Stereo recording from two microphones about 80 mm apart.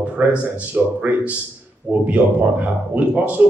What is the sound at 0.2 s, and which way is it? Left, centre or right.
A man's voice, centre.